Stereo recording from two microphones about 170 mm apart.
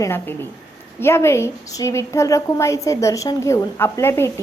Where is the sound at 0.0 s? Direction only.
15° left (ahead or behind).